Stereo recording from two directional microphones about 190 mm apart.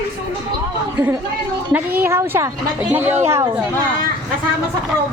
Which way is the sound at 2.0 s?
10° right (ahead or behind).